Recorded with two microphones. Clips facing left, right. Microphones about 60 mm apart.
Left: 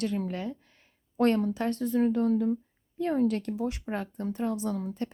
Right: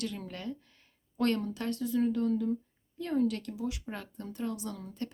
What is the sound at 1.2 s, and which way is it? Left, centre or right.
Speech, left.